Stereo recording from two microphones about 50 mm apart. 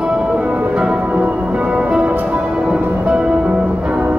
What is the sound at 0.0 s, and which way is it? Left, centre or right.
Music, right.